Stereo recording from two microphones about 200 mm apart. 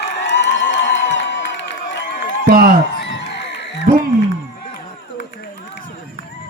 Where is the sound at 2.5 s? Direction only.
50° right (ahead or behind).